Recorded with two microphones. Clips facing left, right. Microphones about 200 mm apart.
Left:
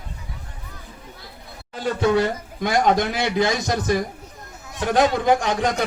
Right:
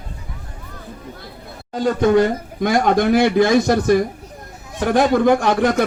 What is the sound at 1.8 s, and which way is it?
Speech, 50° right (ahead or behind).